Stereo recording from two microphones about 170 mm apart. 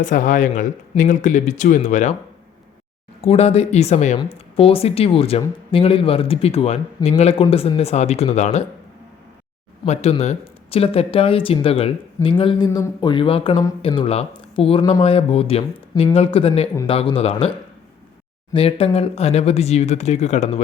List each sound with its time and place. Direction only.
0.0 s speech: 50° left (ahead or behind)
3.2 s speech: 35° left (ahead or behind)
9.8 s speech: 40° left (ahead or behind)
18.5 s speech: 35° left (ahead or behind)